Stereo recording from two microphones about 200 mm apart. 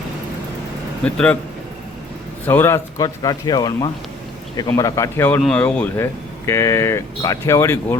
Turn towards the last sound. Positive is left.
turn(degrees=15)  # may be behind; listen again after turning